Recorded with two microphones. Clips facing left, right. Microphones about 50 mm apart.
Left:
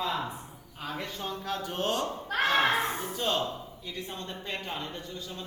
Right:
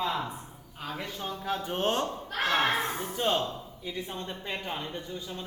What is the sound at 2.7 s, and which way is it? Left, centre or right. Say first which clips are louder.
Speech: left 1 dB; left.